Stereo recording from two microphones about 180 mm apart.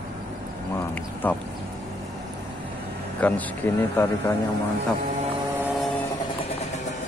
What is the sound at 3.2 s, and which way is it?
Speech, 10° left (ahead or behind).